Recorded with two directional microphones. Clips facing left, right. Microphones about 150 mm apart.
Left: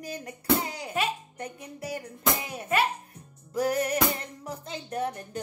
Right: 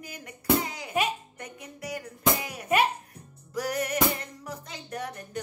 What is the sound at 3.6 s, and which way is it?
Music, 30° left (ahead or behind).